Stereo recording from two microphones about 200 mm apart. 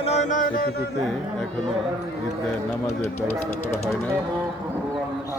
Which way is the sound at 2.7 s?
5° left (ahead or behind).